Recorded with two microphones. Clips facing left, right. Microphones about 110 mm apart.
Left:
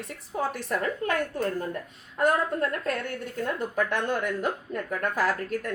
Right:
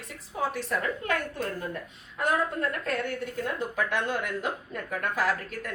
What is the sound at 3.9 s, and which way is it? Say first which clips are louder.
A woman's voice: left 2 dB; 50° left (ahead or behind).